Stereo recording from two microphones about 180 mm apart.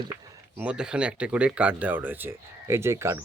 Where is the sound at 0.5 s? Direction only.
5° right (ahead or behind).